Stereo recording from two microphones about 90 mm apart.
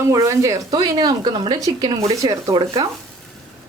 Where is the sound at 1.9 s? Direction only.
40° right (ahead or behind).